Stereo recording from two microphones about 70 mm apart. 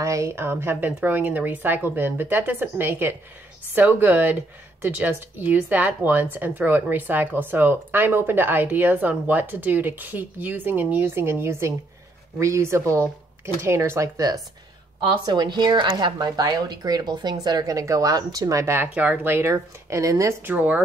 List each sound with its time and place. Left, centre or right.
0.0 s speech: right
15.2 s speech: right
18.8 s speech: right
19.5 s speech: right
20.4 s speech: right